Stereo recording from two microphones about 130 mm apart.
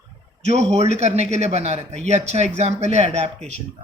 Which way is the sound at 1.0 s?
60° right (ahead or behind).